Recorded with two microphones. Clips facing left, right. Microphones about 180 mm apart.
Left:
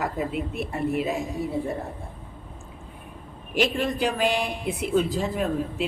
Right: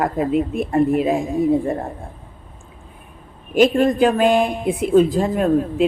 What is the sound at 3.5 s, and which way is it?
Speech, 50° right (ahead or behind).